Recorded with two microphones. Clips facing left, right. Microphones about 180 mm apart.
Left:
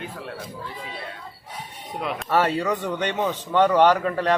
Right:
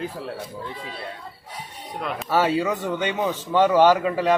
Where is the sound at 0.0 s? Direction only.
30° right (ahead or behind).